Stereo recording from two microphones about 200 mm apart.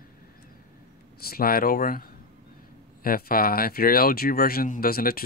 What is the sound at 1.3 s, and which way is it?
Speech, 50° left (ahead or behind).